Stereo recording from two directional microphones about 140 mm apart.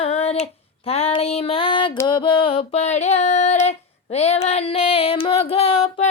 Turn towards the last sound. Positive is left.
turn(degrees=45)  # may be behind; listen again after turning